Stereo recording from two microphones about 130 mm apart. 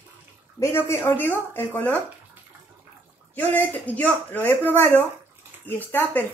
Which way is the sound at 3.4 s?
15° left (ahead or behind).